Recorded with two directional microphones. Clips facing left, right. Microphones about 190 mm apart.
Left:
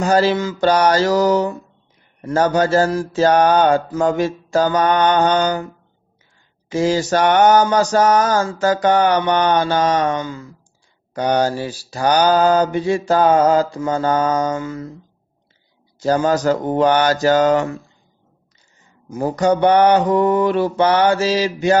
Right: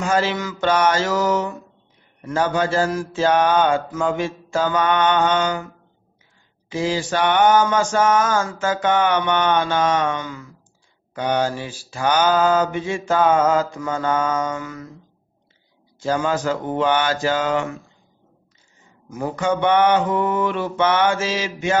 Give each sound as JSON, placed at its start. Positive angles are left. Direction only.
{"t": 0.0, "sound": "mantra", "side_deg": 35}
{"t": 6.7, "sound": "mantra", "side_deg": 45}
{"t": 16.0, "sound": "mantra", "side_deg": 40}
{"t": 19.0, "sound": "mantra", "side_deg": 35}